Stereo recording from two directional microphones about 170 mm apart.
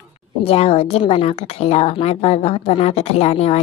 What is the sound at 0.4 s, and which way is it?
A woman's voice, 35° left (ahead or behind).